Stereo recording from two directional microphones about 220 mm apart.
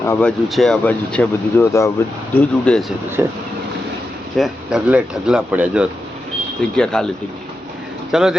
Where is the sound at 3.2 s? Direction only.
15° right (ahead or behind).